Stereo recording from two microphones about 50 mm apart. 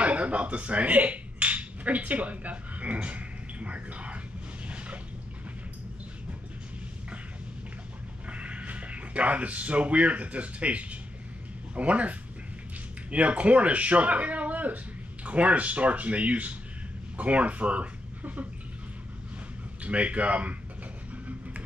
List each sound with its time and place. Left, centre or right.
0.0 s speech: right
4.6 s a sound: right
8.3 s speech: right
19.8 s speech: right